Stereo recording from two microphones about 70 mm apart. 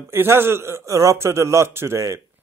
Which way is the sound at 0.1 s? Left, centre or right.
Right.